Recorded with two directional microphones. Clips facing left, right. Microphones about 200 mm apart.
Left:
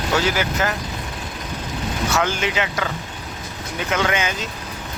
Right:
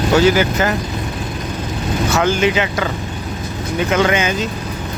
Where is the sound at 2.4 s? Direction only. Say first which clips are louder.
Right 7 dB; 5° right (ahead or behind).